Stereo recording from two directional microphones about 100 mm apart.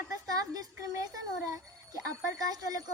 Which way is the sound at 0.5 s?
35° right (ahead or behind).